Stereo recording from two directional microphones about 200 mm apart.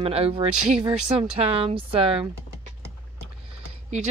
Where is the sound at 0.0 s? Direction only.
30° right (ahead or behind).